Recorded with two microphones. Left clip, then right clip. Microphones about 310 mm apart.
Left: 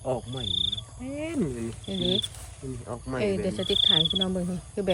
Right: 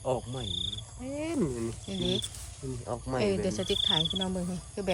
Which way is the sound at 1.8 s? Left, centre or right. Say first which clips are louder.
Left 6 dB; centre.